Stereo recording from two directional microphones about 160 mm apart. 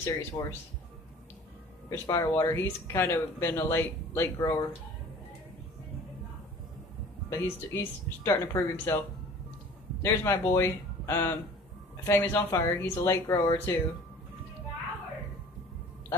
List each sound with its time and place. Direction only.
0.0 s speech: 20° left (ahead or behind)
1.9 s speech: 20° left (ahead or behind)
7.2 s speech: 15° left (ahead or behind)
10.0 s speech: 20° left (ahead or behind)